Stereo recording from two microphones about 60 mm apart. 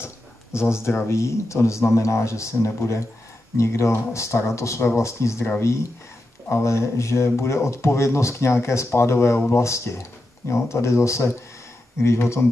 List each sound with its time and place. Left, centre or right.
0.0 s a man's voice: left
6.5 s a man's voice: left